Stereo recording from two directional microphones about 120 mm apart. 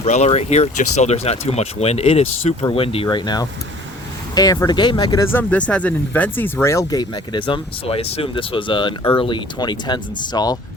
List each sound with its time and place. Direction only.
0.0 s speech: 70° left (ahead or behind); by 5.2 s 35° left (ahead or behind)
5.2 s speech: 15° left (ahead or behind)
7.0 s speech: 40° left (ahead or behind)